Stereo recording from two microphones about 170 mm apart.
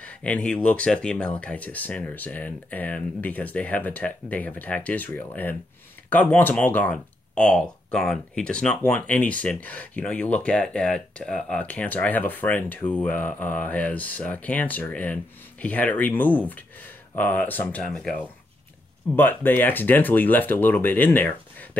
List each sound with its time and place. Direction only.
0.0 s speech: 10° left (ahead or behind)
19.1 s speech: 10° left (ahead or behind)